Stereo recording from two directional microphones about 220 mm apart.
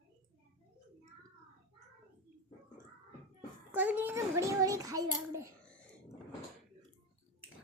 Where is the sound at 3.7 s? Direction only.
5° right (ahead or behind).